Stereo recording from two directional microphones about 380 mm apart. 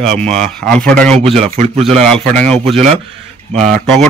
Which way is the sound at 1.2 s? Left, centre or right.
Centre.